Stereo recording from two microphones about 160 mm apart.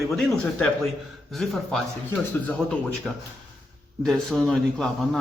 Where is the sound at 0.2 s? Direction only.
Centre (ahead or behind).